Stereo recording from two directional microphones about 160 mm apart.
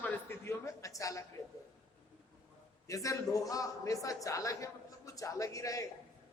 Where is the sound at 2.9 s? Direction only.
20° left (ahead or behind).